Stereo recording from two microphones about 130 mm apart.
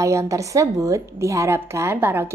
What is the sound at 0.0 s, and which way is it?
A woman's voice, 25° right (ahead or behind).